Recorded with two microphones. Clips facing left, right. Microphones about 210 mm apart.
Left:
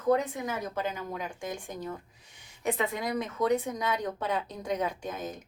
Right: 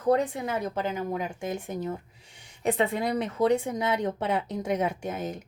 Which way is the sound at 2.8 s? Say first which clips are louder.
Right 6 dB; 30° right (ahead or behind).